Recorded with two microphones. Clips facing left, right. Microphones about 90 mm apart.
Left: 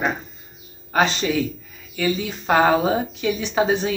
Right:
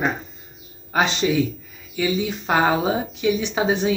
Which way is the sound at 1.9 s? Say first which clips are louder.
Right 1 dB; 15° right (ahead or behind).